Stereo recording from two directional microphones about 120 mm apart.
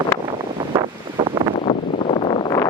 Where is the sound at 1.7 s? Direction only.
50° left (ahead or behind).